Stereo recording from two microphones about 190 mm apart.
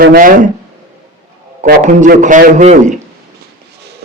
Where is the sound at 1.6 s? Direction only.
40° right (ahead or behind).